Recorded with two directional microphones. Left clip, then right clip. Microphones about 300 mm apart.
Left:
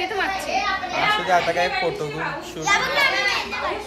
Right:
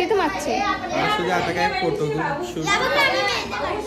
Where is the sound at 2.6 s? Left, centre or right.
Centre.